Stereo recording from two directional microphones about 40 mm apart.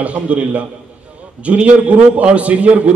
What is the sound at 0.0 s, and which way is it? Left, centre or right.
A man's voice, right.